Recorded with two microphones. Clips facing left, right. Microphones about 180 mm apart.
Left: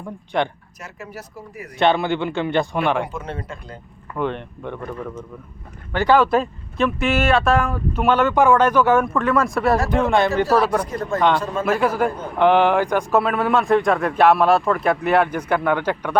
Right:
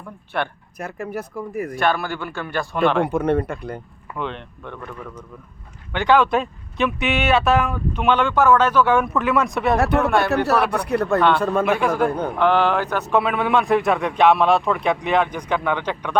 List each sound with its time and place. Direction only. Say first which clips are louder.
0.8 s speech: right 7 dB; 55° right (ahead or behind)
1.8 s a man's voice: left 6 dB; 20° left (ahead or behind)
3.0 s speech: right 9 dB; 60° right (ahead or behind)
4.2 s speech: left 5 dB; 10° left (ahead or behind)
5.9 s speech: left 1 dB; 5° left (ahead or behind)
9.7 s speech: right 2 dB; 65° right (ahead or behind)
11.8 s speech: right 1 dB; 10° left (ahead or behind)